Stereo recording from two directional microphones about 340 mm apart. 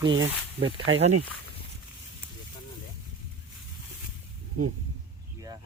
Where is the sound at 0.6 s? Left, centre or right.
Right.